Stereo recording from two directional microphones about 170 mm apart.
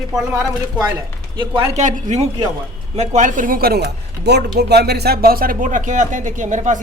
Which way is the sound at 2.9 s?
45° right (ahead or behind).